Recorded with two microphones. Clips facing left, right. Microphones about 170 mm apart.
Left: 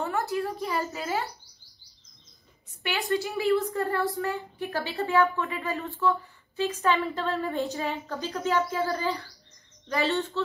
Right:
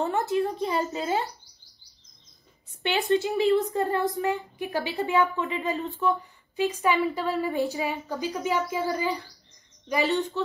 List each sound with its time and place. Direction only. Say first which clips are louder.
0.0 s a child's voice: right 4 dB; 20° right (ahead or behind)
2.8 s a woman's voice: right 4 dB; 20° right (ahead or behind)